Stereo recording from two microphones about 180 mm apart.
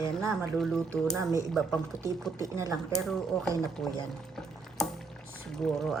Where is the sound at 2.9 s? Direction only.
Centre (ahead or behind).